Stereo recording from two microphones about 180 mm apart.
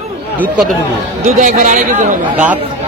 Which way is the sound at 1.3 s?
40° right (ahead or behind).